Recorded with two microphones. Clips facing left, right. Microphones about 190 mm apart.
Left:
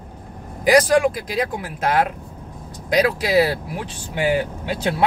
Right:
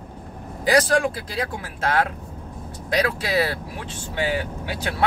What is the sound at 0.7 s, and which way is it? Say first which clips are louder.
Speech: left 4 dB; 15° left (ahead or behind).